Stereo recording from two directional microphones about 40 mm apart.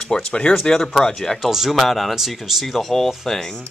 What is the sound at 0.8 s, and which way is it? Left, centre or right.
Speech, centre.